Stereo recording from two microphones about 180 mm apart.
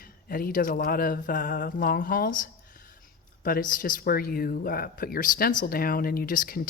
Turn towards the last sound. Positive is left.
turn(degrees=50)  # may be behind; listen again after turning